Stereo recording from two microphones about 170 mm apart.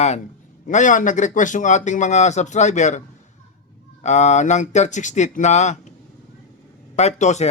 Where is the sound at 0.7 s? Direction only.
45° left (ahead or behind).